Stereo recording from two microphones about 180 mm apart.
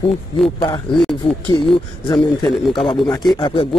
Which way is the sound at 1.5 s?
30° left (ahead or behind).